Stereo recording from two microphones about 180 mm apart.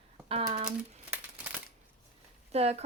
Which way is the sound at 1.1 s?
10° right (ahead or behind).